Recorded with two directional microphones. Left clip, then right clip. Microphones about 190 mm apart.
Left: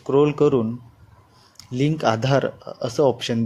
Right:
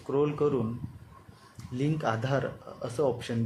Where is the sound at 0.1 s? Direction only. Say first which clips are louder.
Left 10 dB; 35° left (ahead or behind).